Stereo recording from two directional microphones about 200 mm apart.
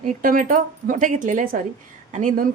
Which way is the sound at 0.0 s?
40° right (ahead or behind).